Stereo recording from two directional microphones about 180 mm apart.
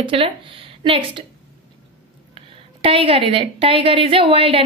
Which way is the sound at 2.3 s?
30° right (ahead or behind).